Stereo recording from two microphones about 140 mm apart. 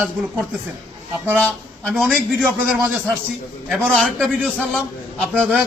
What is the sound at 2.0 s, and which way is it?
Speech, 5° left (ahead or behind).